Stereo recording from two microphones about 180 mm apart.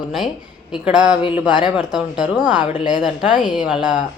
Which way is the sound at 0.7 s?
5° right (ahead or behind).